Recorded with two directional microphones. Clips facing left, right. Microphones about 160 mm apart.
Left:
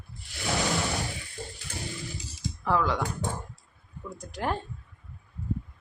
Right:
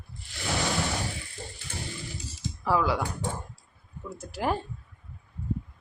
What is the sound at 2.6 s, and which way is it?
Speech, 5° right (ahead or behind).